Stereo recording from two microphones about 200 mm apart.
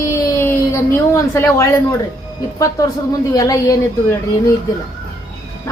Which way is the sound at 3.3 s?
15° left (ahead or behind).